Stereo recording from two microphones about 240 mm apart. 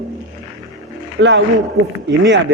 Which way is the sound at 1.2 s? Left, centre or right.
Right.